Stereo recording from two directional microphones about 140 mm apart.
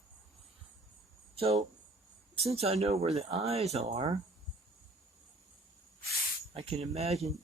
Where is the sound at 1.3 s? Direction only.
45° right (ahead or behind).